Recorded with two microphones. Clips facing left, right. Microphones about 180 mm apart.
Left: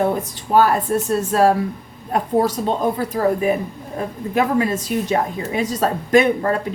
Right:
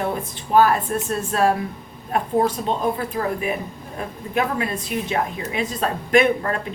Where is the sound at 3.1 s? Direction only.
40° left (ahead or behind).